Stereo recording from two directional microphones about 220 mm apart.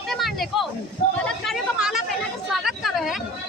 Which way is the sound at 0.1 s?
Centre (ahead or behind).